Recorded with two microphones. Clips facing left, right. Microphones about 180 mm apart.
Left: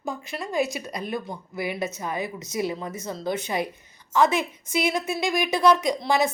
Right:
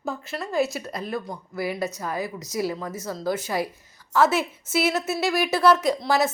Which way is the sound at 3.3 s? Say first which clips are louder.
Right 1 dB; centre (ahead or behind).